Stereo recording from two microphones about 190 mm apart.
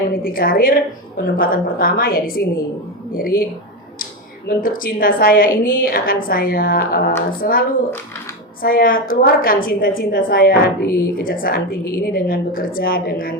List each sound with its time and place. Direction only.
0.1 s a woman's voice: 50° left (ahead or behind)
4.4 s a woman's voice: 50° left (ahead or behind)
8.6 s a woman's voice: 50° left (ahead or behind)